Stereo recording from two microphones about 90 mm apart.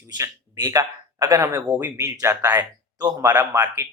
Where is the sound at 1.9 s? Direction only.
35° right (ahead or behind).